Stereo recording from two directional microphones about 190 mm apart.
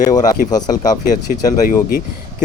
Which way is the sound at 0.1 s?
20° left (ahead or behind).